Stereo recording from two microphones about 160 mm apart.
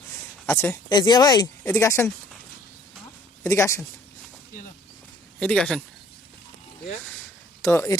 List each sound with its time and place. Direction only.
0.4 s speech: 15° left (ahead or behind)
0.9 s speech: 25° left (ahead or behind)
3.4 s speech: 15° left (ahead or behind)
5.4 s speech: 10° left (ahead or behind)
7.6 s speech: 15° left (ahead or behind)